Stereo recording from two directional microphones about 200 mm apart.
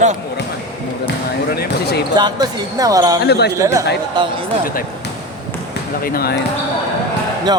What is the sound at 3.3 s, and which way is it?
Speech, 55° left (ahead or behind).